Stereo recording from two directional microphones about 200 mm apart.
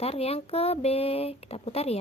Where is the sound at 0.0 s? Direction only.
30° left (ahead or behind).